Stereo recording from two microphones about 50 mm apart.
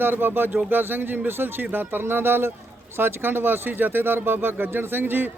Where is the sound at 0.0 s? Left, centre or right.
Right.